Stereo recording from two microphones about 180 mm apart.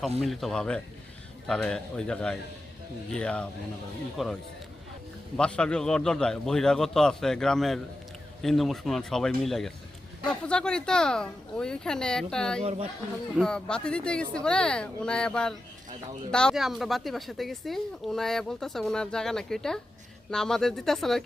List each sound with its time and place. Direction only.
0.2 s a woman's voice: centre (ahead or behind)
5.4 s a woman's voice: 5° left (ahead or behind)
12.6 s speech: 35° right (ahead or behind)
13.3 s a woman's voice: 5° left (ahead or behind)